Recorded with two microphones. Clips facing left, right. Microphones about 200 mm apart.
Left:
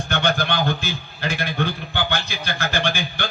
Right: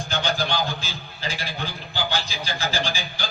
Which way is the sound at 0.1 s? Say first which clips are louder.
Left 3 dB; 60° left (ahead or behind).